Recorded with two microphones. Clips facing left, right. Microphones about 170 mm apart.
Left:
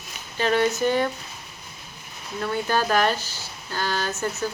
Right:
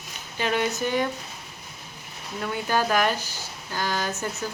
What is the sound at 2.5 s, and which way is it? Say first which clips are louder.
A woman's voice: left 1 dB; 10° right (ahead or behind).